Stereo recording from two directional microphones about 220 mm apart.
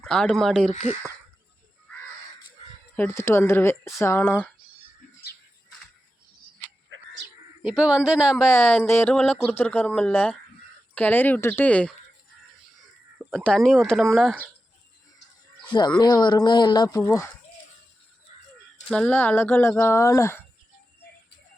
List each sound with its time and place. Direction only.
0.0 s speech: 5° left (ahead or behind)
0.7 s speech: 35° left (ahead or behind)
2.9 s speech: 10° left (ahead or behind)
6.9 s a sound: 60° right (ahead or behind)
7.6 s speech: 5° right (ahead or behind)
8.5 s speech: 10° left (ahead or behind)
13.1 s speech: centre (ahead or behind)
16.0 s speech: 20° left (ahead or behind)
18.9 s speech: 5° left (ahead or behind)